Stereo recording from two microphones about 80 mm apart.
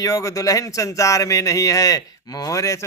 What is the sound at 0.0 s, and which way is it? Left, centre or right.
Speech, left.